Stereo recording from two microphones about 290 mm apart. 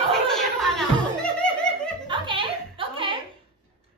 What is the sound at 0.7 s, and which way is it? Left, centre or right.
Music, centre.